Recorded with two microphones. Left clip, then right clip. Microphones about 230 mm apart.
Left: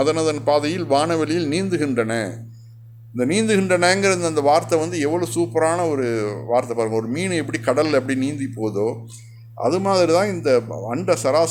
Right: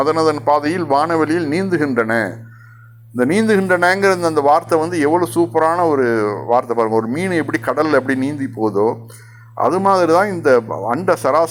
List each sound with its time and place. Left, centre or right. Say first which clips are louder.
0.0 s speech: right 4 dB; centre